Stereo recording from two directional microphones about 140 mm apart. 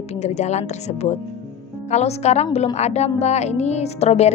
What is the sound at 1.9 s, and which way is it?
A woman's voice, 50° left (ahead or behind).